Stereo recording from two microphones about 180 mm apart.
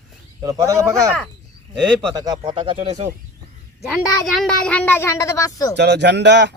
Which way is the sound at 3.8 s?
Centre (ahead or behind).